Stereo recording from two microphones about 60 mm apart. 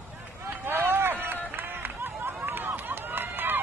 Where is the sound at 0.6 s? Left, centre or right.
Right.